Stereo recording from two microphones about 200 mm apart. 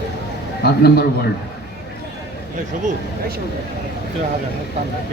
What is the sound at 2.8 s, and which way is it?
Speech, 50° right (ahead or behind).